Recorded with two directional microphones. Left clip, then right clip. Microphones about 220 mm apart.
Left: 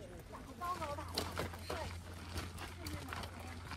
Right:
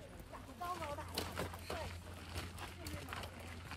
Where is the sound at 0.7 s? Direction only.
20° left (ahead or behind).